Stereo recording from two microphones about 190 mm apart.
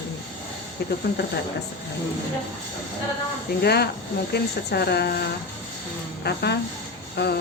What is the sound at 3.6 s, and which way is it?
Speech, 55° left (ahead or behind).